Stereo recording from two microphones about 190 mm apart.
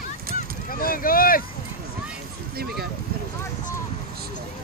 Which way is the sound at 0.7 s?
50° left (ahead or behind).